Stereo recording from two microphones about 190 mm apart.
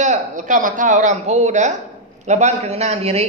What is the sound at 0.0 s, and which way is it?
A man's voice, 40° right (ahead or behind).